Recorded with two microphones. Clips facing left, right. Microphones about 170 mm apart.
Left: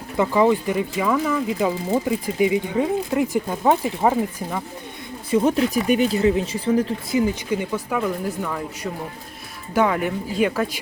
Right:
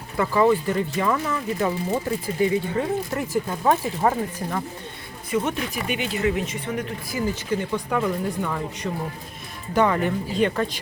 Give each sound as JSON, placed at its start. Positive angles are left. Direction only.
{"t": 0.2, "sound": "speech", "side_deg": 15}
{"t": 5.3, "sound": "speech", "side_deg": 30}
{"t": 7.2, "sound": "speech", "side_deg": 15}